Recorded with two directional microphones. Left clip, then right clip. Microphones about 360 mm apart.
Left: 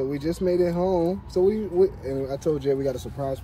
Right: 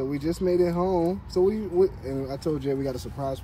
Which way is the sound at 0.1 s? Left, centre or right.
Centre.